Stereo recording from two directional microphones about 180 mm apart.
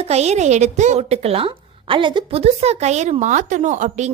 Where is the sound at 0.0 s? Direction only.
35° right (ahead or behind).